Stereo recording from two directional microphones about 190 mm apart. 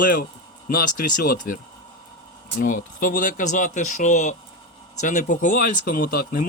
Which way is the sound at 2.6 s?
45° left (ahead or behind).